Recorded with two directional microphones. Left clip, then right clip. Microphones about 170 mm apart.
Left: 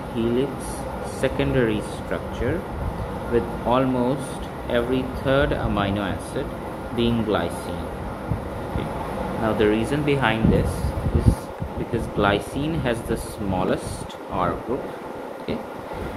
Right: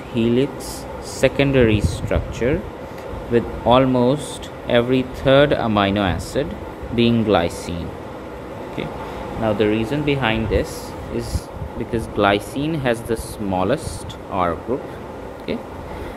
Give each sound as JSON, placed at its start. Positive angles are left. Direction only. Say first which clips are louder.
{"t": 0.1, "sound": "speech", "louder": "right 5 dB", "side_deg": -35}
{"t": 9.4, "sound": "speech", "louder": "right 2 dB", "side_deg": -20}
{"t": 11.9, "sound": "speech", "louder": "right 4 dB", "side_deg": -40}